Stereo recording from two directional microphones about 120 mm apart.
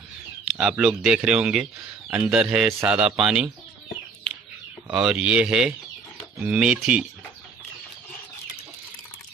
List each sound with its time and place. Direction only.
0.5 s speech: 5° right (ahead or behind)
2.0 s speech: 20° right (ahead or behind)
2.3 s speech: 5° right (ahead or behind)
4.8 s speech: 5° right (ahead or behind)